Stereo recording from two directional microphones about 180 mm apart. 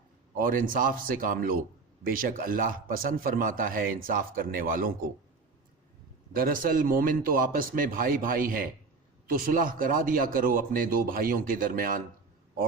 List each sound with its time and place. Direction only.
0.3 s a man's voice: 50° right (ahead or behind)
6.3 s a man's voice: 50° right (ahead or behind)